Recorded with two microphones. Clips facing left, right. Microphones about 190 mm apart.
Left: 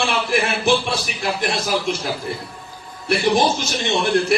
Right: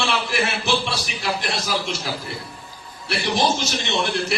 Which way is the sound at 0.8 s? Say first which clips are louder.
Left 3 dB; 50° left (ahead or behind).